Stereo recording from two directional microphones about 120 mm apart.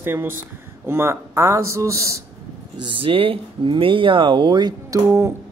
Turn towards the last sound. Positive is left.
turn(degrees=-25)  # may be behind; listen again after turning